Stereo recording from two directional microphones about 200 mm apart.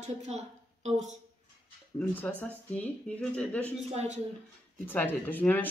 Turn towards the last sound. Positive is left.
turn(degrees=10)  # may be behind; listen again after turning